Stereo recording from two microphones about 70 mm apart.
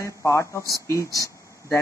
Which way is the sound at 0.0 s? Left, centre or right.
Left.